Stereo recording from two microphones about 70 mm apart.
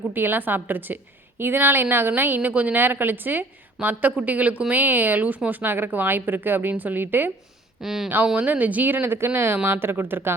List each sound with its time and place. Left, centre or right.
0.1 s a woman's voice: right
7.8 s speech: centre
8.2 s a woman's voice: centre